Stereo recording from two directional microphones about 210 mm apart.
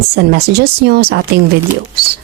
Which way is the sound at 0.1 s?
50° right (ahead or behind).